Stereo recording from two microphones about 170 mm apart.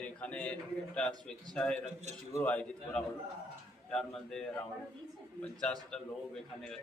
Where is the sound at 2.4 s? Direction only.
5° left (ahead or behind).